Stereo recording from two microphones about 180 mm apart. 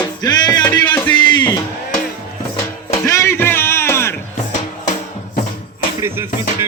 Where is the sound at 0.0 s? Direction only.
25° left (ahead or behind).